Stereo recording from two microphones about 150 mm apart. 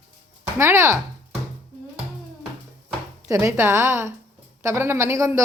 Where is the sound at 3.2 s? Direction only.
20° right (ahead or behind).